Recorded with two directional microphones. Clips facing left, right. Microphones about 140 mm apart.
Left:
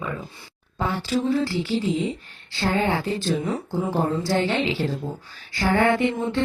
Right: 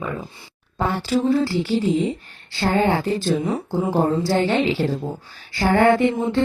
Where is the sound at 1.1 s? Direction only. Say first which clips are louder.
Right 4 dB; 40° right (ahead or behind).